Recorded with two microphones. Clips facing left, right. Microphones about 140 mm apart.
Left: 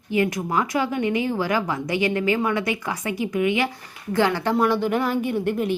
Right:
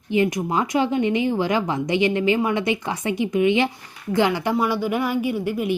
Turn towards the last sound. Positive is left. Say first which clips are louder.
# even
turn(degrees=-5)  # may be behind; listen again after turning